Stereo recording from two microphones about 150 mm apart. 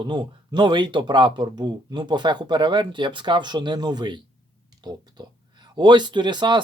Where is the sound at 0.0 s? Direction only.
30° right (ahead or behind).